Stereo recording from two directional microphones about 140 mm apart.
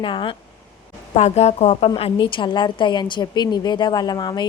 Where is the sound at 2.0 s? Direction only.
40° left (ahead or behind).